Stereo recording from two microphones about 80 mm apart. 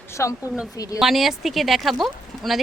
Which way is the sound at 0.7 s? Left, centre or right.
Left.